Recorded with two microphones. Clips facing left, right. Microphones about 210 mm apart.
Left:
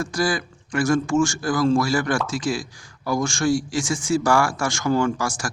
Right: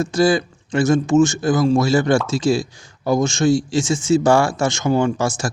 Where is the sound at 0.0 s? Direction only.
25° right (ahead or behind).